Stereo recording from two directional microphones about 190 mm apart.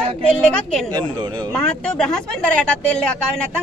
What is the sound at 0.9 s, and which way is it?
Speech, 25° right (ahead or behind).